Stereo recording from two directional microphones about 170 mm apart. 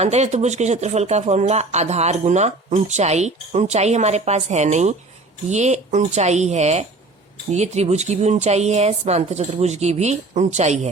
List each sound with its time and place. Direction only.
0.0 s speech: 40° right (ahead or behind)